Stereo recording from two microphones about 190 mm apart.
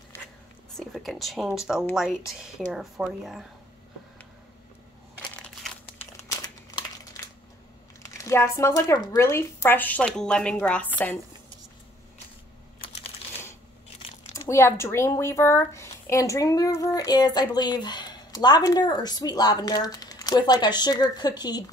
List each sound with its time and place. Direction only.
0.7 s speech: centre (ahead or behind)
5.2 s crushing: 5° left (ahead or behind)
6.4 s crumpling: 20° left (ahead or behind)
8.0 s speech: 15° left (ahead or behind)
14.3 s speech: 15° left (ahead or behind)